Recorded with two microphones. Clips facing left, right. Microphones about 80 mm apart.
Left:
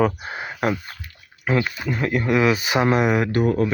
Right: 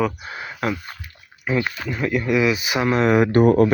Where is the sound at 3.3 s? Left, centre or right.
Right.